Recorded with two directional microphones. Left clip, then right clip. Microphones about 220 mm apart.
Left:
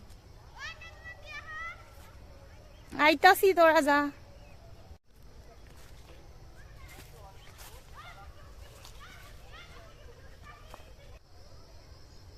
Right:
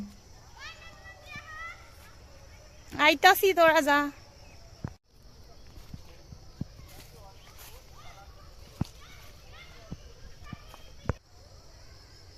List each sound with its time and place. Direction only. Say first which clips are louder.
0.6 s children playing: left 2 dB; 15° left (ahead or behind)
1.2 s a sound: left 1 dB; 15° left (ahead or behind)
2.9 s speech: right 1 dB; centre (ahead or behind)